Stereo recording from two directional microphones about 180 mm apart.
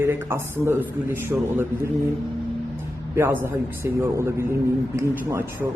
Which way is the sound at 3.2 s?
10° right (ahead or behind).